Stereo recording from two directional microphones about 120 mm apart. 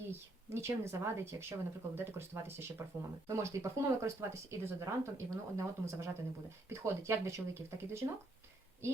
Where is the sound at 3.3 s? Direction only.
25° right (ahead or behind).